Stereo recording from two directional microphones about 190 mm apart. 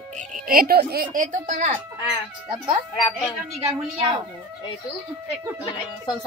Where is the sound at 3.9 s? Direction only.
25° right (ahead or behind).